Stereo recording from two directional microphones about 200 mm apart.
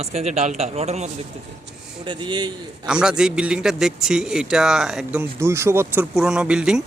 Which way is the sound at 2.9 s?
5° right (ahead or behind).